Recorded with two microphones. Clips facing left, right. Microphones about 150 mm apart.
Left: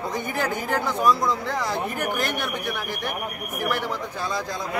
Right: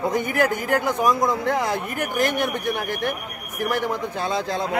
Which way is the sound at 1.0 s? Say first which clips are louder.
Left 2 dB; 20° right (ahead or behind).